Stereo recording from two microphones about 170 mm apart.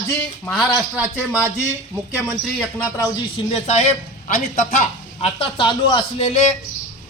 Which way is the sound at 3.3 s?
40° left (ahead or behind).